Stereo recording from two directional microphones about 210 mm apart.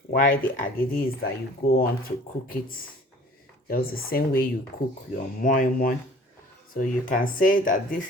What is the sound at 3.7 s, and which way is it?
Speech, 45° left (ahead or behind).